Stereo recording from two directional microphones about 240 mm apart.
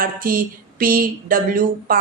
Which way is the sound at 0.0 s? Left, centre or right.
Right.